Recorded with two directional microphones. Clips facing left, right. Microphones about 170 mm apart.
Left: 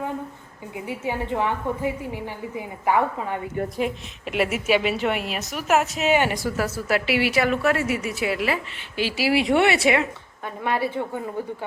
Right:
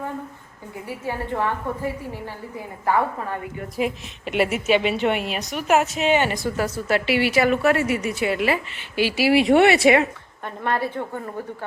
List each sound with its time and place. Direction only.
0.7 s a woman's voice: 15° left (ahead or behind)
3.8 s a woman's voice: centre (ahead or behind)
9.0 s speech: 60° right (ahead or behind)
10.4 s a woman's voice: 5° left (ahead or behind)